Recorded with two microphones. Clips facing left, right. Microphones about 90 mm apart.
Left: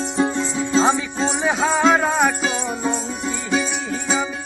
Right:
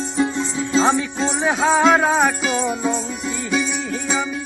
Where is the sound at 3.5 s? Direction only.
30° left (ahead or behind).